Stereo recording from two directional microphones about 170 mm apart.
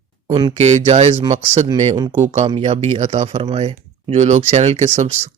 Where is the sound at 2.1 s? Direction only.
45° right (ahead or behind).